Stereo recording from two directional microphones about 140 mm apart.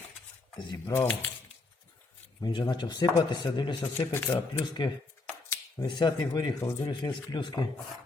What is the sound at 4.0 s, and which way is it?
Speech, 15° left (ahead or behind).